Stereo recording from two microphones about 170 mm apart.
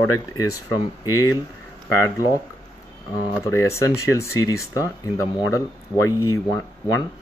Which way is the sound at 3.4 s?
15° left (ahead or behind).